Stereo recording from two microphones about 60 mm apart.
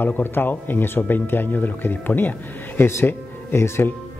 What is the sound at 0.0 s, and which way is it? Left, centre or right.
Speech, left.